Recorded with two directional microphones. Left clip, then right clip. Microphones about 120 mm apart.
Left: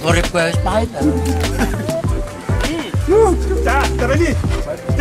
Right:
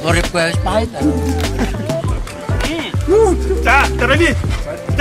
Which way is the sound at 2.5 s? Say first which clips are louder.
Right 1 dB; centre (ahead or behind).